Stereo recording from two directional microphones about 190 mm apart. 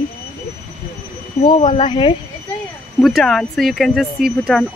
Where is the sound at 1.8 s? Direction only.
25° left (ahead or behind).